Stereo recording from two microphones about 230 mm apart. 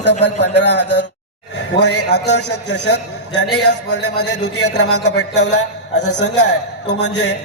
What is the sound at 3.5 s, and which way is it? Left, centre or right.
Speech, left.